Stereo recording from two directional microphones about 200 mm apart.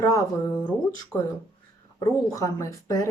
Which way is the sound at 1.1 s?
5° left (ahead or behind).